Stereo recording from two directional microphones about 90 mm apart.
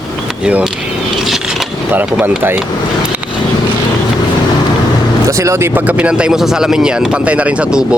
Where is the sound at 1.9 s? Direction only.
20° right (ahead or behind).